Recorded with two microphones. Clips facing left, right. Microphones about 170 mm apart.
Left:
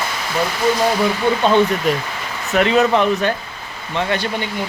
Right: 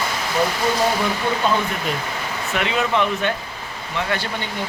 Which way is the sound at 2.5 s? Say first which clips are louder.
Left 7 dB; 40° left (ahead or behind).